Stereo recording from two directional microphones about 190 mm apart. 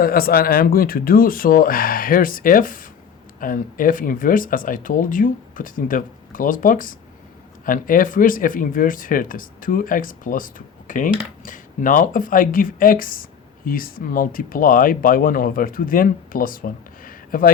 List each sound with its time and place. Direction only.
0.0 s speech: 50° left (ahead or behind)